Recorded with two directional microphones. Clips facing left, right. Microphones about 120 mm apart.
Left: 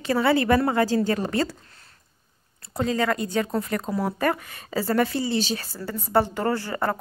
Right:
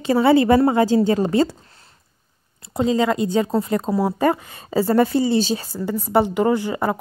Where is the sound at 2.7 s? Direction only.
20° right (ahead or behind).